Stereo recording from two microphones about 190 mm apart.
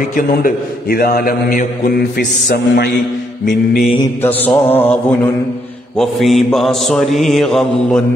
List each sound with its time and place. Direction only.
0.0 s a man's voice: 45° left (ahead or behind)
2.1 s speech: 60° left (ahead or behind)
4.2 s mantra: 10° left (ahead or behind)